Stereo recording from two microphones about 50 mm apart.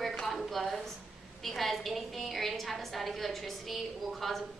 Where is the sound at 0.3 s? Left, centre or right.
Centre.